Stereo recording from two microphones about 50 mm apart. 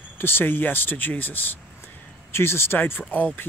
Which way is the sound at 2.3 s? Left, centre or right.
Left.